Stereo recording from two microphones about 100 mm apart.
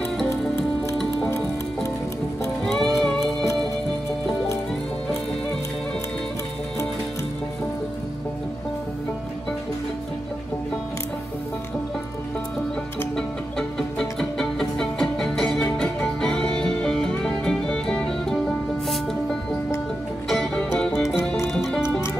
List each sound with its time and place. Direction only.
2.8 s music: 5° left (ahead or behind)
13.1 s music: 5° left (ahead or behind)